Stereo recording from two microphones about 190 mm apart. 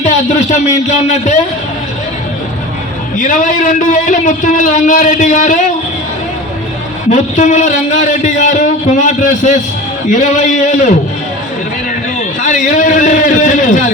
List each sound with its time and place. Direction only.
0.0 s a man's voice: 35° left (ahead or behind)
3.2 s a man's voice: 40° left (ahead or behind)
7.1 s a man's voice: 40° left (ahead or behind)
12.4 s a sound: 40° left (ahead or behind)